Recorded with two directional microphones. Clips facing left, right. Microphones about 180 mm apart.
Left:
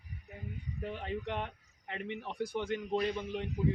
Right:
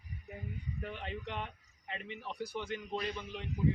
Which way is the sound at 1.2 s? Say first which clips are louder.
Left 4 dB; 55° left (ahead or behind).